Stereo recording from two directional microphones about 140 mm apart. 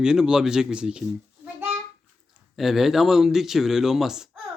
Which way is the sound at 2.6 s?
5° right (ahead or behind).